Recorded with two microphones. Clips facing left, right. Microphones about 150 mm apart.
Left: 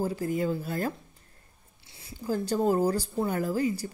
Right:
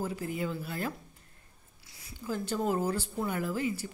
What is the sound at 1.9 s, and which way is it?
Speech, 30° left (ahead or behind).